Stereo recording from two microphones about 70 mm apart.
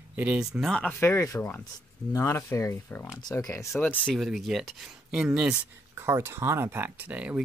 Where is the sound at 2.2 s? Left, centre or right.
Left.